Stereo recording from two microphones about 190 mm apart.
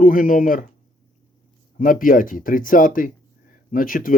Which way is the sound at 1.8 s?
45° left (ahead or behind).